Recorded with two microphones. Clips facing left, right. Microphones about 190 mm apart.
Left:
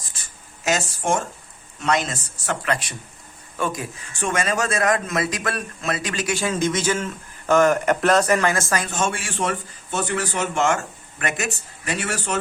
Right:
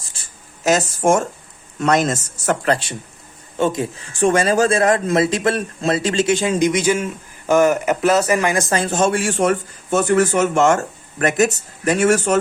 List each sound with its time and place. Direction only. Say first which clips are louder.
0.1 s writing: right 1 dB; 35° right (ahead or behind)
1.8 s speech: right 6 dB; 45° right (ahead or behind)
3.6 s speech: right 7 dB; 25° right (ahead or behind); by 12.4 s 45° right (ahead or behind)